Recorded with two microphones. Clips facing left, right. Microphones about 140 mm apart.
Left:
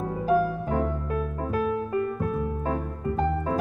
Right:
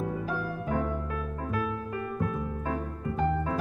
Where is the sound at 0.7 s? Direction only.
35° left (ahead or behind).